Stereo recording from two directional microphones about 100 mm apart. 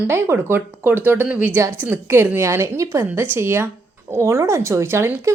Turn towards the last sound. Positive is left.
turn(degrees=-25)  # may be behind; listen again after turning